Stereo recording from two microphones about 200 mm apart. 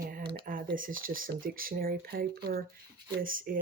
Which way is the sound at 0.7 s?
45° right (ahead or behind).